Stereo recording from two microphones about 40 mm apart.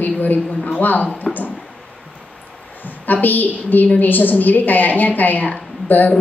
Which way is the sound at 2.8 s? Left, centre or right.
Left.